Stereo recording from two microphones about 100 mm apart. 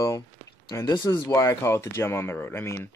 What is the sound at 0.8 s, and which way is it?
Speech, 45° left (ahead or behind).